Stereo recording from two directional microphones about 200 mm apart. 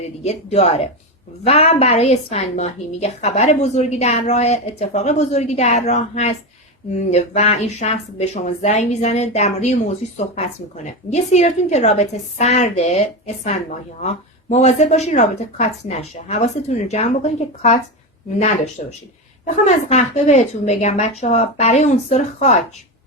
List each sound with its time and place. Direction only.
0.2 s a woman's voice: 30° left (ahead or behind)
10.8 s a woman's voice: 35° left (ahead or behind)